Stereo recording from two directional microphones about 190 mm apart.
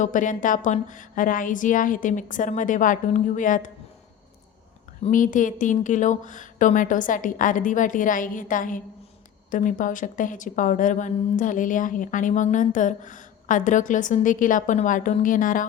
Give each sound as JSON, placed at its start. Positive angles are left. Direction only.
{"t": 0.0, "sound": "a woman's voice", "side_deg": 40}
{"t": 5.0, "sound": "a woman's voice", "side_deg": 45}